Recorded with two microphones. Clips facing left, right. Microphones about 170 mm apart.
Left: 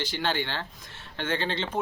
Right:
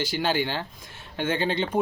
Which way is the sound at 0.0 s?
10° right (ahead or behind).